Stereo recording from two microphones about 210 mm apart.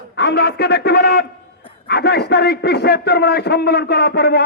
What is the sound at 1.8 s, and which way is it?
A man's voice, 50° left (ahead or behind).